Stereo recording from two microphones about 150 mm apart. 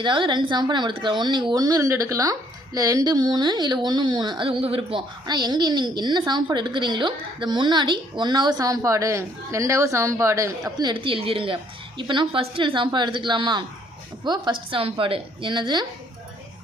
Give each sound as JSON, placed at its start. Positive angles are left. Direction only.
{"t": 0.0, "sound": "a woman's voice", "side_deg": -30}
{"t": 10.8, "sound": "a woman's voice", "side_deg": -30}